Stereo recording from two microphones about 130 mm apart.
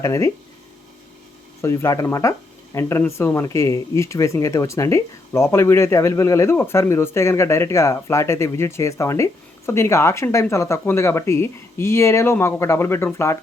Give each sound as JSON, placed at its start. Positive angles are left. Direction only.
{"t": 0.0, "sound": "speech", "side_deg": 25}
{"t": 1.6, "sound": "speech", "side_deg": 20}